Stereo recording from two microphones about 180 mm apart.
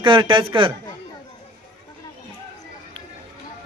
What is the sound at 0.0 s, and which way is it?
Speech, 25° right (ahead or behind).